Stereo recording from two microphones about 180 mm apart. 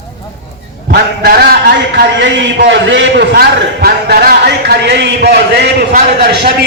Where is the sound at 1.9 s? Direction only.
85° right.